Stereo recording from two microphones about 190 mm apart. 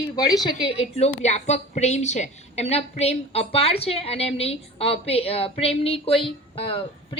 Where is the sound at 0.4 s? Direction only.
25° left (ahead or behind).